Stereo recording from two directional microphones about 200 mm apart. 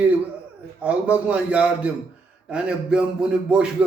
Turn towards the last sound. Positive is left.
turn(degrees=-5)  # may be behind; listen again after turning